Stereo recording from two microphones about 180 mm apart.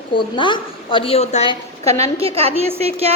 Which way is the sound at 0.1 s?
25° left (ahead or behind).